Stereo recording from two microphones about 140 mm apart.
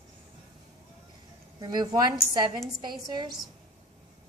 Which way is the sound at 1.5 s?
30° right (ahead or behind).